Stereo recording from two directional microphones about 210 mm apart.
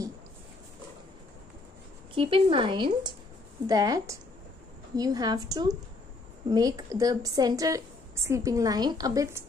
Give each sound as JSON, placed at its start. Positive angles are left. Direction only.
{"t": 2.1, "sound": "a woman's voice", "side_deg": -25}